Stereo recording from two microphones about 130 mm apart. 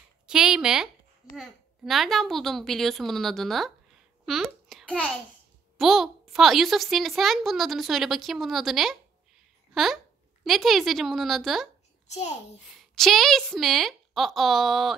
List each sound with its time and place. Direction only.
0.3 s a woman's voice: 5° right (ahead or behind)
4.8 s a child's voice: 10° left (ahead or behind)
12.1 s a child's voice: 60° left (ahead or behind)
12.7 s a woman's voice: centre (ahead or behind)